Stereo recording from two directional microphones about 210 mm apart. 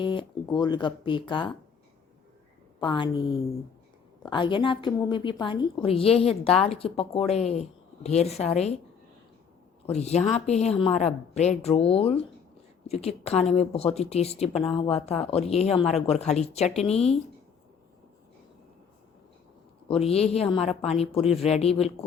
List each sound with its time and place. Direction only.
0.0 s a woman's voice: 25° left (ahead or behind)
2.8 s a woman's voice: 25° left (ahead or behind)
9.9 s a woman's voice: 30° left (ahead or behind)
19.9 s a woman's voice: 30° left (ahead or behind)